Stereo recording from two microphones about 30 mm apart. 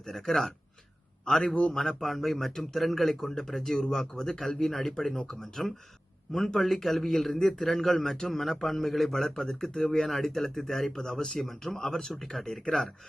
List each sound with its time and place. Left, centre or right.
0.0 s speech: centre
2.0 s speech: centre
9.2 s speech: centre
10.1 s speech: centre